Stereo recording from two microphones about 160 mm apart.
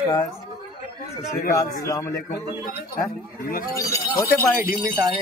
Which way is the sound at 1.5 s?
20° left (ahead or behind).